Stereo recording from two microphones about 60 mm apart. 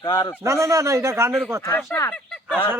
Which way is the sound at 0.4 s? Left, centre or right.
Right.